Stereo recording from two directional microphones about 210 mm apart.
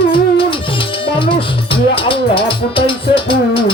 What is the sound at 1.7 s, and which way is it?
Music, 25° left (ahead or behind).